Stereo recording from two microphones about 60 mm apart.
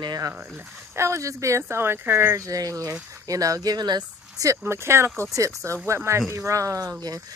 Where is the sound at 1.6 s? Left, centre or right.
Right.